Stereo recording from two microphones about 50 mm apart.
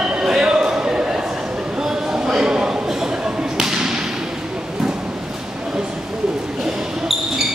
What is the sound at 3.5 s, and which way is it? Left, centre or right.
Whip, centre.